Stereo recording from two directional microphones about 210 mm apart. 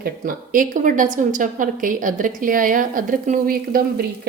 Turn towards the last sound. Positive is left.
turn(degrees=-45)  # may be behind; listen again after turning